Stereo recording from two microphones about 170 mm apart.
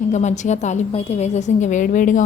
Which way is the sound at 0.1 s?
45° left (ahead or behind).